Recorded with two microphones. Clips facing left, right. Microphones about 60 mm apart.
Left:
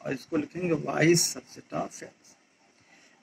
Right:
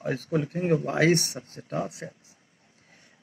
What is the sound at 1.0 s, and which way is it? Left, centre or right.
Speech, right.